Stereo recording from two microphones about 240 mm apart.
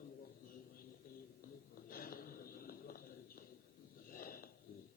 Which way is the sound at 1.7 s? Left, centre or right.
Left.